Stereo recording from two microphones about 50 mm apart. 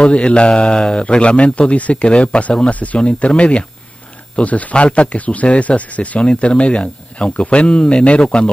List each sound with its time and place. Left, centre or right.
0.0 s speech: left
1.0 s speech: left